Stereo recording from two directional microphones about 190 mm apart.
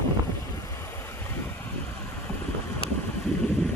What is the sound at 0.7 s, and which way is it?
Vehicle, 15° left (ahead or behind).